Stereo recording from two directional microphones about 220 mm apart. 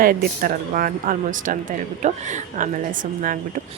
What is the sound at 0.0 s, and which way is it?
A woman's voice, 40° right (ahead or behind).